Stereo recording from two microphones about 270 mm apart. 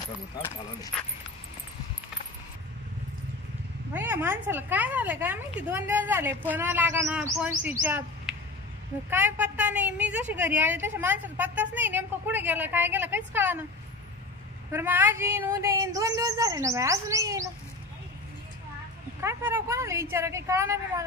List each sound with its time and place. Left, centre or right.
3.9 s a woman's voice: centre
14.7 s a woman's voice: centre
19.2 s a woman's voice: centre